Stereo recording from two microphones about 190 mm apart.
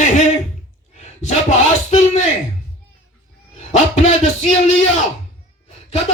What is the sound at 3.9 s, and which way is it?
Music, 35° left (ahead or behind).